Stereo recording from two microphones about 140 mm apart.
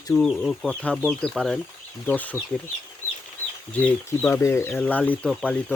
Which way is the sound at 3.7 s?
10° left (ahead or behind).